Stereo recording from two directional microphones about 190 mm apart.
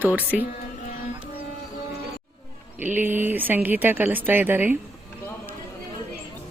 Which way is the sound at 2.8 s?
10° right (ahead or behind).